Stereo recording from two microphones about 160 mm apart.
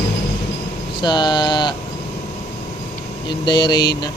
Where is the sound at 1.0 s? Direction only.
30° left (ahead or behind).